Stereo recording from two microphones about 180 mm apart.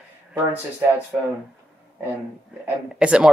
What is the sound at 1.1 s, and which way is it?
Speech, centre (ahead or behind).